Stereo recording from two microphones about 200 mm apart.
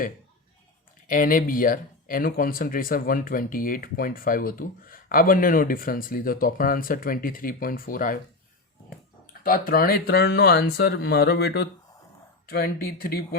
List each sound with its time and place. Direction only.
1.0 s speech: 45° left (ahead or behind)
9.2 s speech: 45° left (ahead or behind)